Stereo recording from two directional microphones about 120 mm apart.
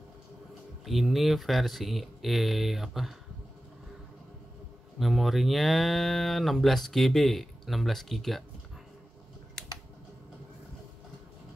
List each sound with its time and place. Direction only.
0.8 s cattle: centre (ahead or behind)
4.9 s cattle: centre (ahead or behind)